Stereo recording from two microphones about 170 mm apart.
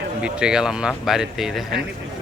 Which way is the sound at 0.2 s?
5° right (ahead or behind).